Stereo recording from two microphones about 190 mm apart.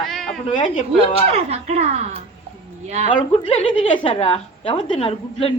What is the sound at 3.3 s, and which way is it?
A woman's voice, 30° left (ahead or behind).